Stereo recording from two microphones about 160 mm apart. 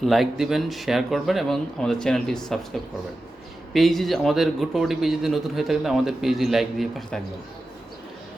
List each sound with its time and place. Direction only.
0.0 s a man's voice: centre (ahead or behind)
3.7 s a man's voice: centre (ahead or behind)